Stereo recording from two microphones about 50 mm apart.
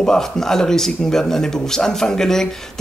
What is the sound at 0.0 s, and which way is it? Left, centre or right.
Speech, centre.